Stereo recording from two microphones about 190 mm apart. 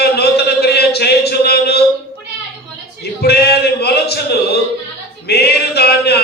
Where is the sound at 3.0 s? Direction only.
60° left (ahead or behind).